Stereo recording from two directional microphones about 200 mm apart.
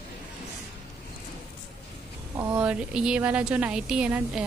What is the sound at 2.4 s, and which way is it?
Speech, 10° right (ahead or behind).